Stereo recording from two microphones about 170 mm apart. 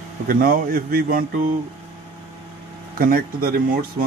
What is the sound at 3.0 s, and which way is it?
Speech, 60° right (ahead or behind).